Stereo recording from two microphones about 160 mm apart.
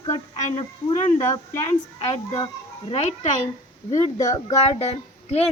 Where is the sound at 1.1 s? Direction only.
20° left (ahead or behind).